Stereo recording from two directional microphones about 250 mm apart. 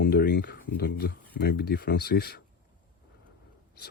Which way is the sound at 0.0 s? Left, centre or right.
Left.